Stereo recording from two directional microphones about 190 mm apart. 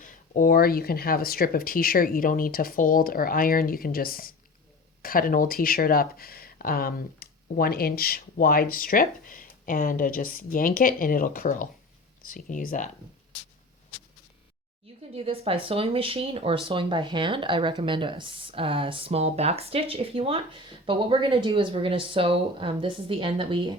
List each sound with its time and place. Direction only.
0.0 s speech: 50° left (ahead or behind)
15.1 s speech: 30° right (ahead or behind)